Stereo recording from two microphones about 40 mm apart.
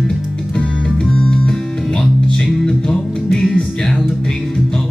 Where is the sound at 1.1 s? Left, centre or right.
Centre.